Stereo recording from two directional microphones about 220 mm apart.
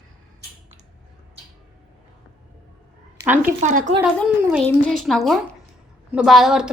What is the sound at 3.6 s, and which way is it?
Speech, 35° right (ahead or behind).